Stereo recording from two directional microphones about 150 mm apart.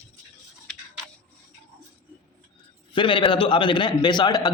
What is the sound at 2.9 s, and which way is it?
A man's voice, 35° left (ahead or behind).